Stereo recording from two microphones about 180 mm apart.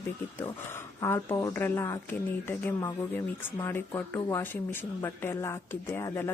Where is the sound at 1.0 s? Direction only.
20° left (ahead or behind).